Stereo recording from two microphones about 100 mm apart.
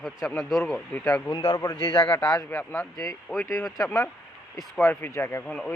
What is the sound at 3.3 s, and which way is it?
Speech, 5° right (ahead or behind).